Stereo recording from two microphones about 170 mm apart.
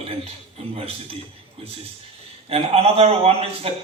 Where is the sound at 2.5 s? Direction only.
35° right (ahead or behind).